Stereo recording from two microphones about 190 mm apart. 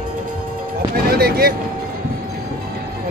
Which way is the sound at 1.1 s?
55° right (ahead or behind).